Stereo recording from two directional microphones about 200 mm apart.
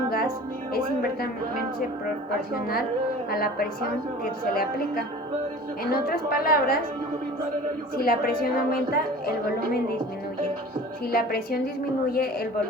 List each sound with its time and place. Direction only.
1.0 s a woman's voice: 50° left (ahead or behind)
3.2 s a woman's voice: 50° left (ahead or behind)
7.9 s a woman's voice: 50° left (ahead or behind)
11.1 s a woman's voice: 50° left (ahead or behind)